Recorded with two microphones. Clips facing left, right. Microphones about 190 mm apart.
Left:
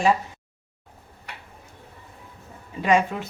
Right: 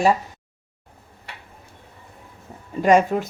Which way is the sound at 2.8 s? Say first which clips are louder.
Right 5 dB; 45° right (ahead or behind).